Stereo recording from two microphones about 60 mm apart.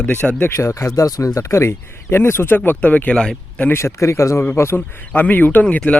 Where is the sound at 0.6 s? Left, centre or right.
Left.